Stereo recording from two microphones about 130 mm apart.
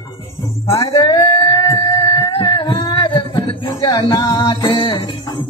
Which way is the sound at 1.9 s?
30° left (ahead or behind).